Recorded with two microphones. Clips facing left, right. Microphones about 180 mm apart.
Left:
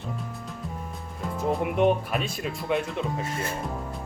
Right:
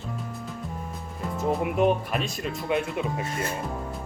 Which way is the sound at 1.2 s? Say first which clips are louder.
Even; centre (ahead or behind).